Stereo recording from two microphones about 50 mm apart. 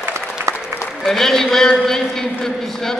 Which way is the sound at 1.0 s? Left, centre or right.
Centre.